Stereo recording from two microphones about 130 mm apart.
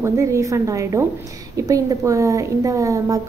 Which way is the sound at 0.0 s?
25° right (ahead or behind).